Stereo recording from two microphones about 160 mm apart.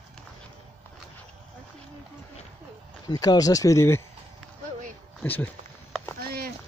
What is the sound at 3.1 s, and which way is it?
Speech, 25° left (ahead or behind).